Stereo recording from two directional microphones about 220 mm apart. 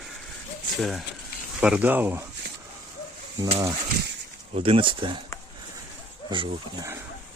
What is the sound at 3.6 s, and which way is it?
Speech, 15° right (ahead or behind).